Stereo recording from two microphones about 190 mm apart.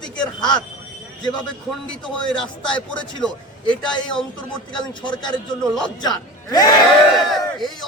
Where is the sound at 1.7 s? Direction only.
5° left (ahead or behind).